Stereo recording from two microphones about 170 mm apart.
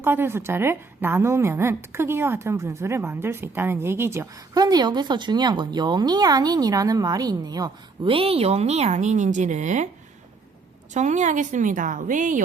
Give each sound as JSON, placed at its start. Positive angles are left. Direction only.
{"t": 0.0, "sound": "a woman's voice", "side_deg": -10}
{"t": 10.9, "sound": "a woman's voice", "side_deg": -45}